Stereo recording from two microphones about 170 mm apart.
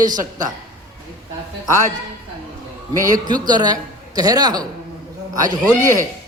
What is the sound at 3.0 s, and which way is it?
A man's voice, 25° right (ahead or behind).